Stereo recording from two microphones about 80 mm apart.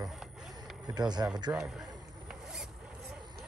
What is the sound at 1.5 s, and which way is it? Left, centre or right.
Zipper, centre.